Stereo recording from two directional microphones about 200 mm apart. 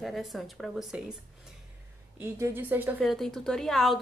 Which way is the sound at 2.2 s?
10° right (ahead or behind).